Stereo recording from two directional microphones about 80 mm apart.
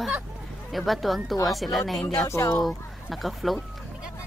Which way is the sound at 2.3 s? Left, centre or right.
Left.